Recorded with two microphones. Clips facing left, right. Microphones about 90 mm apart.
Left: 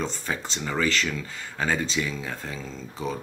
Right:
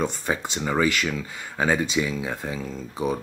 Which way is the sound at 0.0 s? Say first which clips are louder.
Right 4 dB; 15° right (ahead or behind).